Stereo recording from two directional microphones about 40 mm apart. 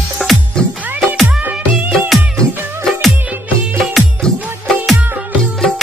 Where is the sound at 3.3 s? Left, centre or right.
Right.